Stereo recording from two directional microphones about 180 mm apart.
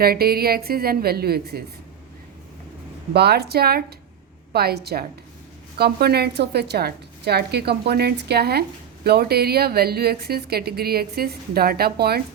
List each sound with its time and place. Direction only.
0.0 s speech: 60° right (ahead or behind)
3.1 s speech: 65° right (ahead or behind)